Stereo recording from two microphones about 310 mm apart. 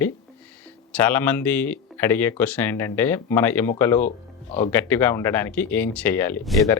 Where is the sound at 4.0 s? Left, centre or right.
Left.